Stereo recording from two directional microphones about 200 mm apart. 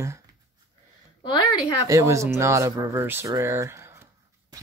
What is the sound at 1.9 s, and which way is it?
Speech, 15° right (ahead or behind).